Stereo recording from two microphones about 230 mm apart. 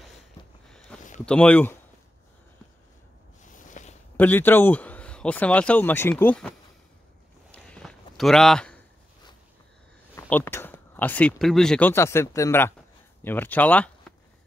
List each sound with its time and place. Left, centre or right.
0.7 s a sound: centre
1.2 s speech: centre
3.6 s a sound: left
4.2 s speech: centre
7.5 s walk: centre
10.1 s speech: centre